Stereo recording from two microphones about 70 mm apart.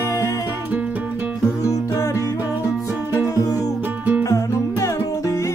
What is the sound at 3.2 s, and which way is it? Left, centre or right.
Music, left.